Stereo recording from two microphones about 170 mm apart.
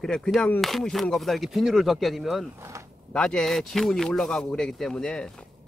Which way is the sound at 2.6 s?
15° right (ahead or behind).